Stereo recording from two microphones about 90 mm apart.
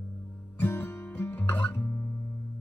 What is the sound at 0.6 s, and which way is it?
Music, 20° left (ahead or behind).